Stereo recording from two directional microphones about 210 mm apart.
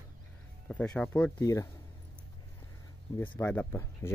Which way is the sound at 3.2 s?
10° left (ahead or behind).